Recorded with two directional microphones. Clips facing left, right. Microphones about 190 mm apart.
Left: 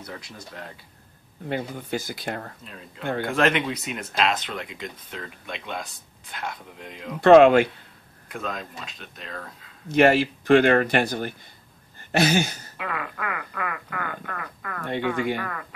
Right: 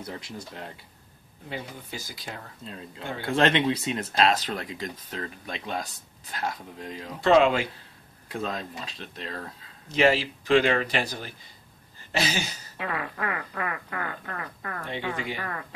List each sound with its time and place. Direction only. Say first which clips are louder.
0.0 s speech: right 2 dB; 25° right (ahead or behind)
1.5 s speech: left 8 dB; 60° left (ahead or behind)
3.3 s speech: right 2 dB; 30° right (ahead or behind)
7.2 s speech: left 7 dB; 60° left (ahead or behind)
8.3 s speech: right 1 dB; 30° right (ahead or behind)
9.8 s speech: left 4 dB; 55° left (ahead or behind)
12.7 s speech: right 1 dB; 30° right (ahead or behind)
14.9 s speech: left 8 dB; 55° left (ahead or behind)